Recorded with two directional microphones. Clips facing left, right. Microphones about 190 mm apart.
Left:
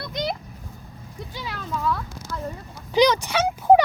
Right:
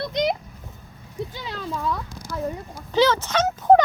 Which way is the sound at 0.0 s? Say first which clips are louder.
Right 5 dB; 20° right (ahead or behind).